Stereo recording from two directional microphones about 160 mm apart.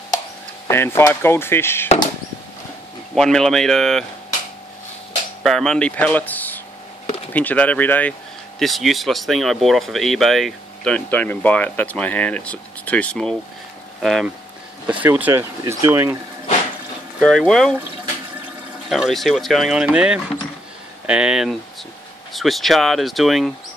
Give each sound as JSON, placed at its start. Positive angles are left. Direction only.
{"t": 0.7, "sound": "speech", "side_deg": 15}
{"t": 3.2, "sound": "speech", "side_deg": 5}
{"t": 5.4, "sound": "speech", "side_deg": 0}
{"t": 14.9, "sound": "speech", "side_deg": -10}
{"t": 17.2, "sound": "speech", "side_deg": 5}
{"t": 18.9, "sound": "speech", "side_deg": 0}